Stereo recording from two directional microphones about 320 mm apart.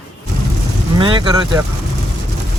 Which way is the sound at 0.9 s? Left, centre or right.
Centre.